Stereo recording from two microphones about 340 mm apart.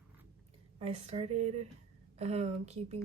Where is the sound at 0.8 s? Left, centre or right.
Centre.